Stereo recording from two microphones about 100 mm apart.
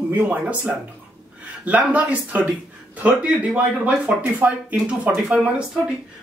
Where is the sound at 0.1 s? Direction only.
15° right (ahead or behind).